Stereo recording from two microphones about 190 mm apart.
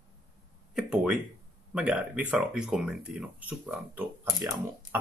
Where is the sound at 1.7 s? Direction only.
5° right (ahead or behind).